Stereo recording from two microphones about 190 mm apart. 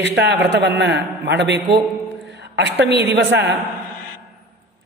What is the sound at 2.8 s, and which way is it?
Speech, 65° right (ahead or behind).